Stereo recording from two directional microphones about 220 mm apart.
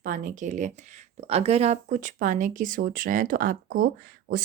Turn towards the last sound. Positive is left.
turn(degrees=-40)  # may be behind; listen again after turning